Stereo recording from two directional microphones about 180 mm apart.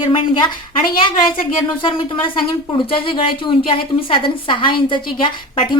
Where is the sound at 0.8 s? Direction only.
50° left (ahead or behind).